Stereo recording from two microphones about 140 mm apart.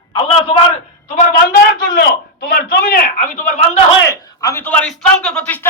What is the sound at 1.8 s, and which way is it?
Speech, 90° left.